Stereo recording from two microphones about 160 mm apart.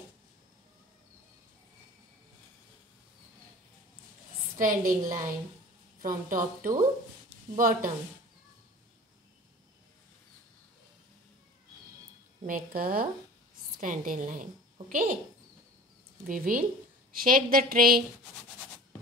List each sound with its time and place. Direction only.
4.6 s a woman's voice: 60° right (ahead or behind)
12.4 s a woman's voice: 65° right (ahead or behind)
16.3 s a woman's voice: 60° right (ahead or behind)